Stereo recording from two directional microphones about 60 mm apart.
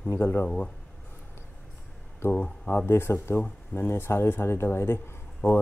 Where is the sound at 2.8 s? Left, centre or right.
Left.